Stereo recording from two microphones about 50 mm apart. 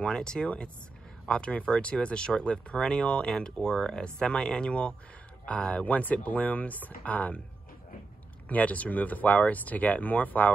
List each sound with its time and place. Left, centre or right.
0.0 s speech: centre
8.5 s speech: left